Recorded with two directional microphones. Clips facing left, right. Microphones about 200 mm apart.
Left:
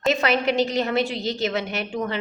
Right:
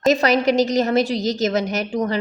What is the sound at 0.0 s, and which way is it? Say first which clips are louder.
A woman's voice: right 5 dB; 40° right (ahead or behind).